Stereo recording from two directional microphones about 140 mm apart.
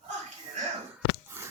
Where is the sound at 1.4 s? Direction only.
15° right (ahead or behind).